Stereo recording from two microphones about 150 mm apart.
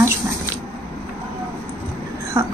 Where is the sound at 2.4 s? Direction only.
15° right (ahead or behind).